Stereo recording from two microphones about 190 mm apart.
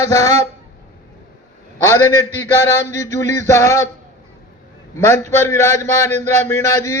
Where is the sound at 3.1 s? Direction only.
15° left (ahead or behind).